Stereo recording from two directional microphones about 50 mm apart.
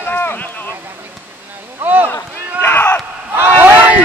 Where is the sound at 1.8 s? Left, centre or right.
Right.